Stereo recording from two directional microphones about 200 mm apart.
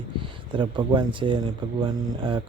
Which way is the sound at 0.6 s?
25° right (ahead or behind).